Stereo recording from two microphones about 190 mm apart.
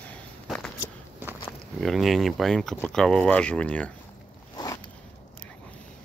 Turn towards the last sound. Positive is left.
turn(degrees=20)  # may be behind; listen again after turning